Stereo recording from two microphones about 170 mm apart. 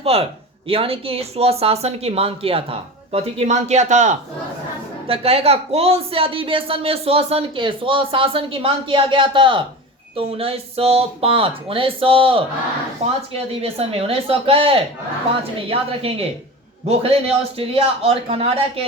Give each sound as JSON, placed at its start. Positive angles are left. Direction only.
{"t": 0.0, "sound": "speech", "side_deg": -35}
{"t": 5.0, "sound": "speech", "side_deg": -35}
{"t": 13.6, "sound": "speech", "side_deg": -35}